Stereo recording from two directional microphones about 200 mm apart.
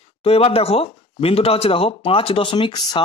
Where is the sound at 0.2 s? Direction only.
30° left (ahead or behind).